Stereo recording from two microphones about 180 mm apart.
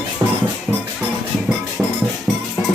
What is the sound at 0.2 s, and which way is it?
Music, 10° right (ahead or behind).